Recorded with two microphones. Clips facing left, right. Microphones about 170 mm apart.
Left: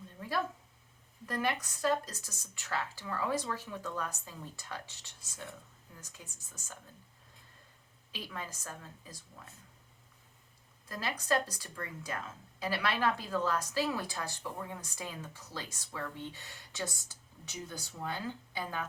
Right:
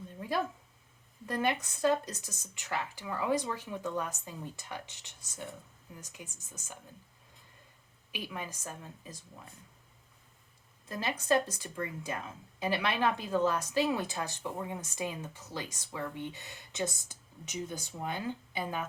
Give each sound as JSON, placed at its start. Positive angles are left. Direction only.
{"t": 0.2, "sound": "a sound", "side_deg": -20}
{"t": 1.3, "sound": "a woman's voice", "side_deg": -20}
{"t": 8.1, "sound": "a woman's voice", "side_deg": -15}
{"t": 10.8, "sound": "a woman's voice", "side_deg": -20}